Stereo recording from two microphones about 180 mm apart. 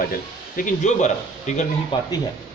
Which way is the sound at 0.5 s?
45° left (ahead or behind).